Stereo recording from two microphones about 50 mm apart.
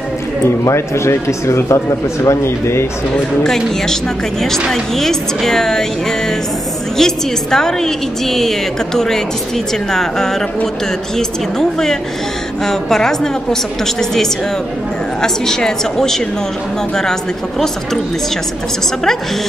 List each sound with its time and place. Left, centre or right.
0.7 s speech: left
3.4 s a woman's voice: centre
15.2 s a woman's voice: centre